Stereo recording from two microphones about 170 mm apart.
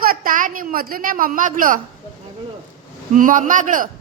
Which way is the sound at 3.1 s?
50° right (ahead or behind).